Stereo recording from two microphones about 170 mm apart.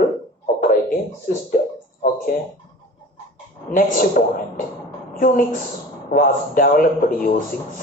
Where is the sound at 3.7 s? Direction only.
55° left (ahead or behind).